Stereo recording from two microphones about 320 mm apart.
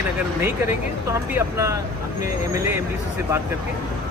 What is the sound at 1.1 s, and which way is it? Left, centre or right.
Speech, centre.